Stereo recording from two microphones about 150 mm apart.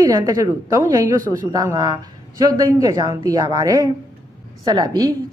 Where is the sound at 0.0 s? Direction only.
25° right (ahead or behind).